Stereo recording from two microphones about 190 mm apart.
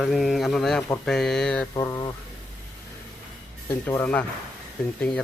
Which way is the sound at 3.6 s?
10° left (ahead or behind).